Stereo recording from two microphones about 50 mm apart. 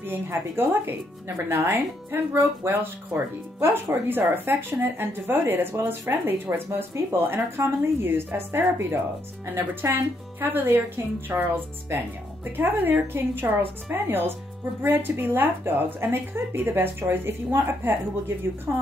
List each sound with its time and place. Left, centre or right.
0.0 s a woman's voice: right
2.3 s speech: right
3.7 s a woman's voice: right
18.7 s speech: right